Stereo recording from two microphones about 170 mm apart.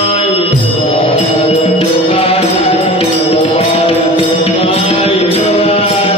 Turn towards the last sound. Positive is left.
turn(degrees=35)  # may be behind; listen again after turning